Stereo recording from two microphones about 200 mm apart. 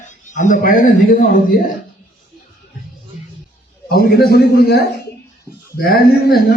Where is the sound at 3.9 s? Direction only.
50° left (ahead or behind).